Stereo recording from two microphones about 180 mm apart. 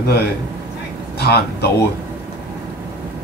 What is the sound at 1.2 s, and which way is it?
Speech, 65° left (ahead or behind).